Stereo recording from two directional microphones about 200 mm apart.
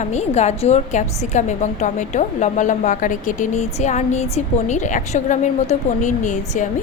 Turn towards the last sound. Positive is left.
turn(degrees=35)  # may be behind; listen again after turning